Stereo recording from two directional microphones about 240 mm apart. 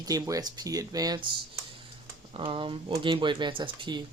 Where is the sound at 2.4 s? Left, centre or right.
Right.